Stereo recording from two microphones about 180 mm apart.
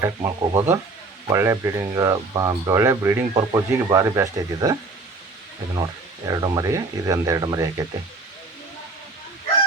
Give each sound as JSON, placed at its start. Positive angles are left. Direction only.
{"t": 0.0, "sound": "speech", "side_deg": -15}